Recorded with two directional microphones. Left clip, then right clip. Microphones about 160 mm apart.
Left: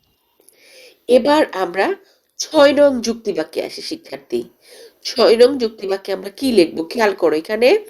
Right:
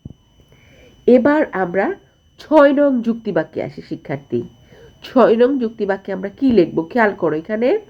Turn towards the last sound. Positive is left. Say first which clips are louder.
# left 3 dB
turn(degrees=20)  # may be behind; listen again after turning